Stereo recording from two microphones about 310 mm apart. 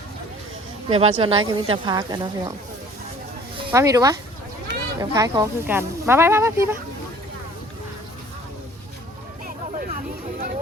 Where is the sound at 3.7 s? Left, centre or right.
Centre.